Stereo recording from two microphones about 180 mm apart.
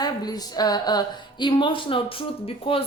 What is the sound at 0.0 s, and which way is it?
A woman's voice, 20° left (ahead or behind).